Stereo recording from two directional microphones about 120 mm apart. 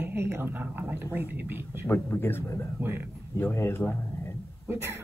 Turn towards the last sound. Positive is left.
turn(degrees=-20)  # may be behind; listen again after turning